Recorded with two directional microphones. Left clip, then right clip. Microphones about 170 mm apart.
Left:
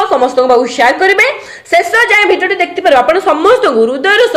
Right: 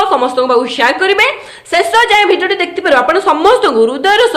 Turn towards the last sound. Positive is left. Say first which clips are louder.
# left 1 dB
turn(degrees=-5)  # may be behind; listen again after turning